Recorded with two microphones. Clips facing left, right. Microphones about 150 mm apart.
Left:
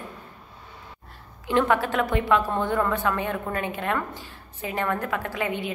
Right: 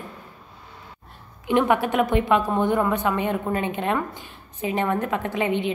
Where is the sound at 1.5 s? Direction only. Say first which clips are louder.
Right 2 dB; 15° right (ahead or behind).